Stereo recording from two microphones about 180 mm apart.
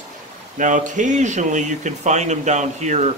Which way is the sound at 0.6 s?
45° right (ahead or behind).